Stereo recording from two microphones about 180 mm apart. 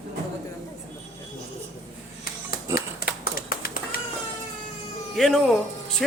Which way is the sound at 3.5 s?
55° left (ahead or behind).